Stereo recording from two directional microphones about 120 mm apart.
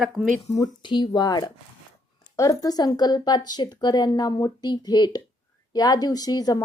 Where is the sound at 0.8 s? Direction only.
40° left (ahead or behind).